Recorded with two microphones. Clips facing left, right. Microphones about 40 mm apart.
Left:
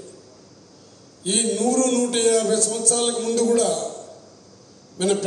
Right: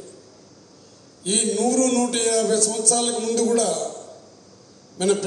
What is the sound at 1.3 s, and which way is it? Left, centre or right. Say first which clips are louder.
A man's voice: even; left.